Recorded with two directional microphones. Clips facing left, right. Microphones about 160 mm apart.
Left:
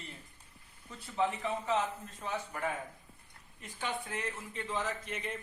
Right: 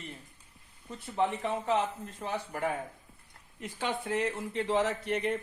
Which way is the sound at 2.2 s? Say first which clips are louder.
Right 4 dB; 65° right (ahead or behind).